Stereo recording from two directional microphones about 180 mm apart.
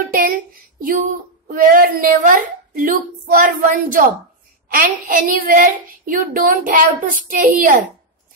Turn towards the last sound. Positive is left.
turn(degrees=-50)  # may be behind; listen again after turning